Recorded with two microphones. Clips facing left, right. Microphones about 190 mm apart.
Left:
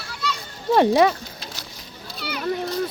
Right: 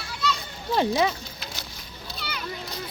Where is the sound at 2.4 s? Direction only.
55° left (ahead or behind).